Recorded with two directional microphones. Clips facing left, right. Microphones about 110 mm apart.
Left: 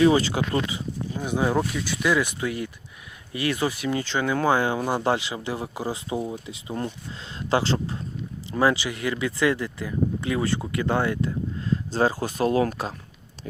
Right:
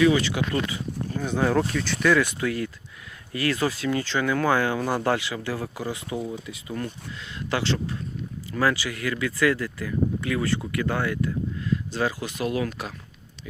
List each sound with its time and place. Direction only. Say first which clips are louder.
0.0 s speech: left 1 dB; 35° left (ahead or behind)
0.7 s speech: even; 15° left (ahead or behind); by 12.9 s 30° left (ahead or behind)